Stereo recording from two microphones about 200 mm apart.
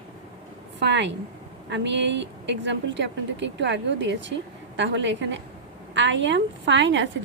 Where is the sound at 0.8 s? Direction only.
60° right (ahead or behind).